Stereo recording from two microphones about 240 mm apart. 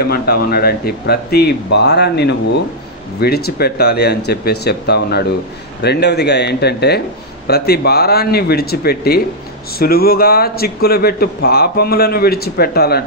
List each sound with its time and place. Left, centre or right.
0.1 s a man's voice: left